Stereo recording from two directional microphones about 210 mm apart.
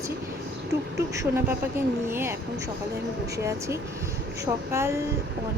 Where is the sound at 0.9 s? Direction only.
15° right (ahead or behind).